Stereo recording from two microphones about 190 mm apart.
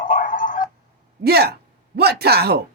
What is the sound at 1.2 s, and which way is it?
Speech, 55° right (ahead or behind).